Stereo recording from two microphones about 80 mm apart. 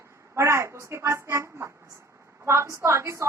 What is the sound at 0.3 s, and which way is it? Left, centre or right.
A woman's voice, right.